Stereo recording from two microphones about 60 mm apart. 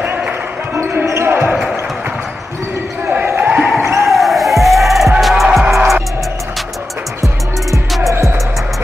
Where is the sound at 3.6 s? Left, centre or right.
Centre.